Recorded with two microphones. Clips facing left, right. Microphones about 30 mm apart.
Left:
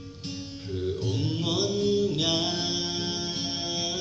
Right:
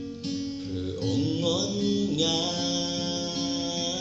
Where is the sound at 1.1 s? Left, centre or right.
Left.